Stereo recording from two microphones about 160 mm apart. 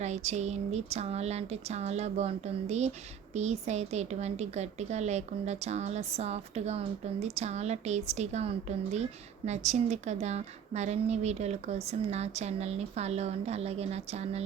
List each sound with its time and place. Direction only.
0.0 s a woman's voice: 45° right (ahead or behind)